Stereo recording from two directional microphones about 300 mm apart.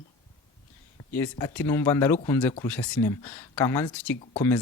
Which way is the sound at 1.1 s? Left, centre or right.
Centre.